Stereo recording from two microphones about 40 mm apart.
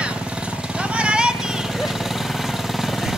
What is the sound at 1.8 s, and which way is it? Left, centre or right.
Vehicle, centre.